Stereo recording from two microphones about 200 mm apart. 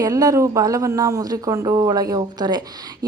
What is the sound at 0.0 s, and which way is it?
Speech, 15° right (ahead or behind).